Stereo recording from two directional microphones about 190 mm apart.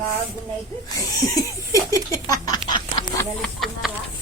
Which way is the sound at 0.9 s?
20° left (ahead or behind).